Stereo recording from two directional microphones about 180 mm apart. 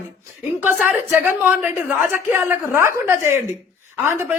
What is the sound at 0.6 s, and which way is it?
Speech, 10° right (ahead or behind).